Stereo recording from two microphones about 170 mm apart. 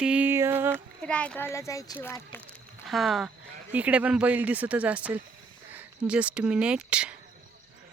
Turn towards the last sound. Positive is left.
turn(degrees=-5)  # may be behind; listen again after turning